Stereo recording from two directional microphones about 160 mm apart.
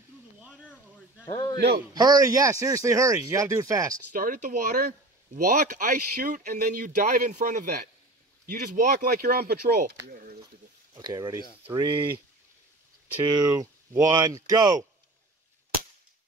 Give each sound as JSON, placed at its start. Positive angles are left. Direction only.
{"t": 1.2, "sound": "a man's voice", "side_deg": 25}
{"t": 2.0, "sound": "speech", "side_deg": -25}
{"t": 4.1, "sound": "speech", "side_deg": -60}
{"t": 11.0, "sound": "speech", "side_deg": -25}
{"t": 13.3, "sound": "speech", "side_deg": -25}